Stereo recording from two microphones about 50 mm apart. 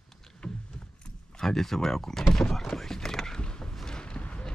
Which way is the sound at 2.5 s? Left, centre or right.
Centre.